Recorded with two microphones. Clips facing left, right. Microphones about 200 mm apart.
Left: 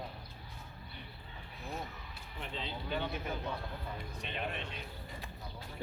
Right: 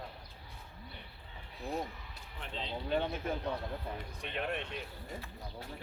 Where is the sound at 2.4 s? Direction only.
Centre (ahead or behind).